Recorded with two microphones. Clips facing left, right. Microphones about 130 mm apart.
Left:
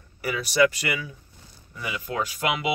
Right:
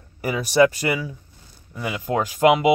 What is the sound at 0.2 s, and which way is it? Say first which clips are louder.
Speech: right 4 dB; 40° right (ahead or behind).